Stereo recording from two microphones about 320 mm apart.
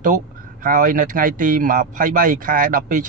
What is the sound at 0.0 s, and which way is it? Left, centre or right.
A man's voice, right.